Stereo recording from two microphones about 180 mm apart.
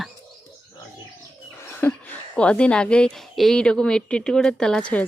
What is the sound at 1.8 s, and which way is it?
A woman's voice, 5° left (ahead or behind).